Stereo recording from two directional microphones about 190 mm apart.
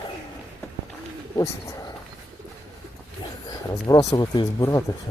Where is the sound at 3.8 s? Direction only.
20° left (ahead or behind).